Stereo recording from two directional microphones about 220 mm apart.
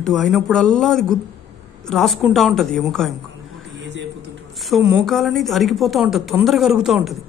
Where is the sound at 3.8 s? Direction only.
55° right (ahead or behind).